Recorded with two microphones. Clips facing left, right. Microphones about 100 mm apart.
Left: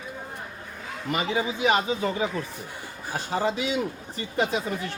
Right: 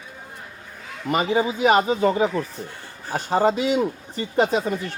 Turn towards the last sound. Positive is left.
turn(degrees=-30)  # may be behind; listen again after turning